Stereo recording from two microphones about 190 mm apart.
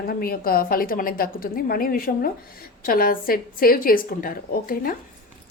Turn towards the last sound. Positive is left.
turn(degrees=50)  # may be behind; listen again after turning